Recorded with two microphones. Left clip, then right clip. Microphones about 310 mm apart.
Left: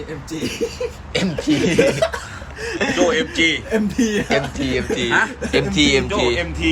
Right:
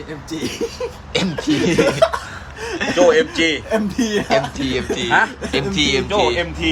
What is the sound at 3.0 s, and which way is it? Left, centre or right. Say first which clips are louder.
Speech: right 6 dB; right.